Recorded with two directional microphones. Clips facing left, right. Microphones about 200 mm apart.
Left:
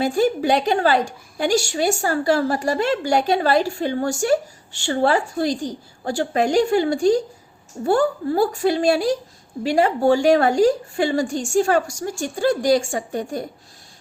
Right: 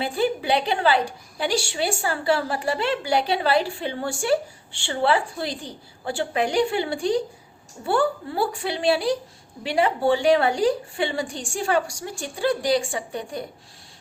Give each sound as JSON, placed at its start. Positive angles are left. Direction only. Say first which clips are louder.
{"t": 0.0, "sound": "a woman's voice", "louder": "left 5 dB", "side_deg": 45}